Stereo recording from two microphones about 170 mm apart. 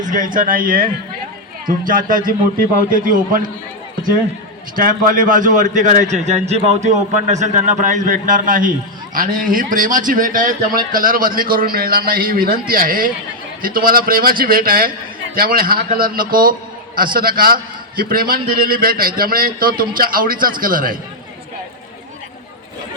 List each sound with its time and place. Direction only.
0.0 s a man's voice: 50° right (ahead or behind)
4.7 s a man's voice: 55° right (ahead or behind)